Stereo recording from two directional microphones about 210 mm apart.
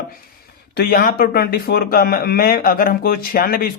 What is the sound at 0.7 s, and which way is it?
Speech, 45° left (ahead or behind).